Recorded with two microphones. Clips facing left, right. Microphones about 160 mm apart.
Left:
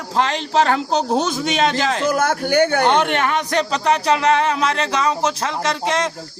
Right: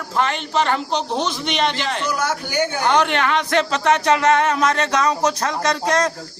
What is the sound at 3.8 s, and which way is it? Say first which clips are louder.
Music: even; 30° left (ahead or behind).